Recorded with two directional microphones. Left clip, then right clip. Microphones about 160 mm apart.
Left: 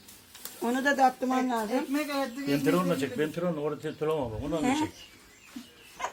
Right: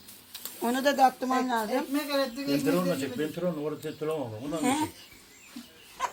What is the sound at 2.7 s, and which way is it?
Speech, 40° left (ahead or behind).